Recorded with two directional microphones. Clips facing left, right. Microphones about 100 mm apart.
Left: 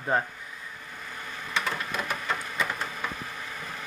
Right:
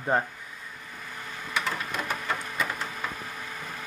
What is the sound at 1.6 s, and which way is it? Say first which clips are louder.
Printer: even; 5° left (ahead or behind).